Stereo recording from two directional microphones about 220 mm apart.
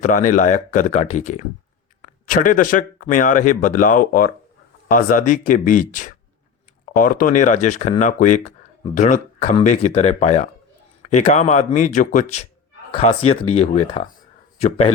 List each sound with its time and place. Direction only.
0.0 s speech: 35° left (ahead or behind)